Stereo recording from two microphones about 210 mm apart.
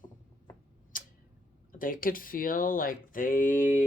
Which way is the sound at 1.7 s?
40° left (ahead or behind).